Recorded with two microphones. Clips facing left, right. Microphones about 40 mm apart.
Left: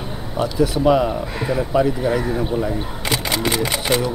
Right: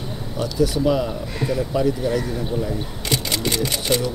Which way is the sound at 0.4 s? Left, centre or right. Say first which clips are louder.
Left 2 dB; left.